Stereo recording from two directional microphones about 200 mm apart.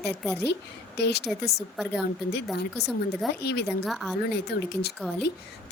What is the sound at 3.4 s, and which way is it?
Speech, 55° left (ahead or behind).